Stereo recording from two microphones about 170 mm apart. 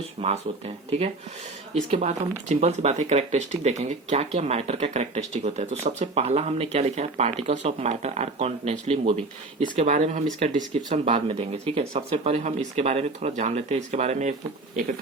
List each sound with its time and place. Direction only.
0.2 s speech: 40° right (ahead or behind)
14.8 s speech: 55° right (ahead or behind)